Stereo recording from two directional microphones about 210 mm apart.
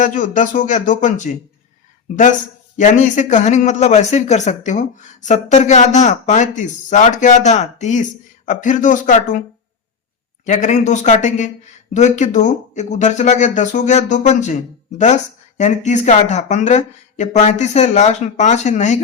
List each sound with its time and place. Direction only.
0.0 s speech: 35° left (ahead or behind)
2.7 s speech: 35° left (ahead or behind)
10.4 s speech: 35° left (ahead or behind)